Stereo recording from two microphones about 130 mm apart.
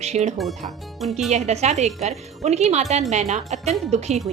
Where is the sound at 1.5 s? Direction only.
60° right (ahead or behind).